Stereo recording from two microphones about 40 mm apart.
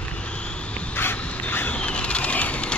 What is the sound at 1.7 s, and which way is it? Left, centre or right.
Vehicle, left.